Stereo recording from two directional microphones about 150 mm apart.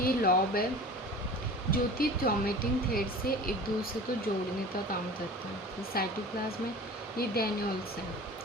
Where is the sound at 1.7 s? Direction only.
75° left (ahead or behind).